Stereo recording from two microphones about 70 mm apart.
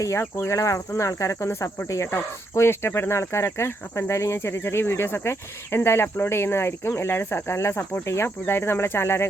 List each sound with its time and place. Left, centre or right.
0.0 s speech: left